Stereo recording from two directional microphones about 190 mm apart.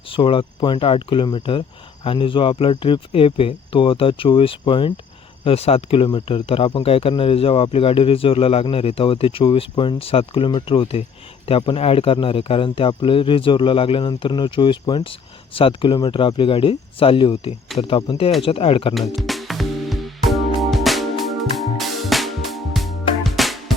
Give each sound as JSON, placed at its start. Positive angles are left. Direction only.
{"t": 0.1, "sound": "speech", "side_deg": 25}
{"t": 18.9, "sound": "music", "side_deg": 0}